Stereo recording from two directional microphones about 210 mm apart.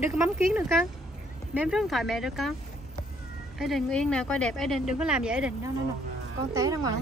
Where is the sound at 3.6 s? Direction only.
Centre (ahead or behind).